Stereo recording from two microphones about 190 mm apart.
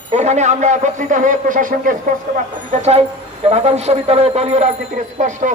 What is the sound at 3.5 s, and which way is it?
Speech, 35° right (ahead or behind).